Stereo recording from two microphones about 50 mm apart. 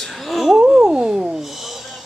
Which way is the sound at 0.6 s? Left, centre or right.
Centre.